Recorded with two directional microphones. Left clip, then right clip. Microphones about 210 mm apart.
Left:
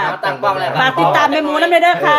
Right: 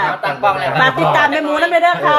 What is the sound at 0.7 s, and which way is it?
Speech, 10° left (ahead or behind).